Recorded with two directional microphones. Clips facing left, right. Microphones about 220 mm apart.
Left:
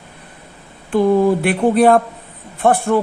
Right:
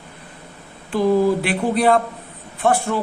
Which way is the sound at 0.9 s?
55° left (ahead or behind).